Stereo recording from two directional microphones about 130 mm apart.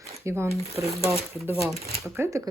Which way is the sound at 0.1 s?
20° right (ahead or behind).